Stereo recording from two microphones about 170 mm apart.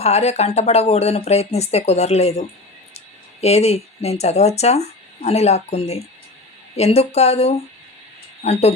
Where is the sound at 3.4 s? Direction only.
40° left (ahead or behind).